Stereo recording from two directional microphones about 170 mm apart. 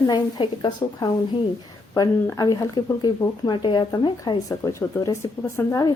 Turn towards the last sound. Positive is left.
turn(degrees=20)  # may be behind; listen again after turning